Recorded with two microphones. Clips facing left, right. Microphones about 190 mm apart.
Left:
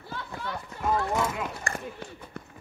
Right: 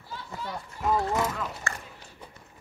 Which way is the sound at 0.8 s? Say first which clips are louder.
Right 1 dB; centre (ahead or behind).